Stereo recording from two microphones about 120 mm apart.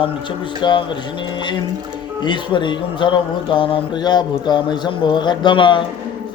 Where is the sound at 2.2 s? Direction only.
40° left (ahead or behind).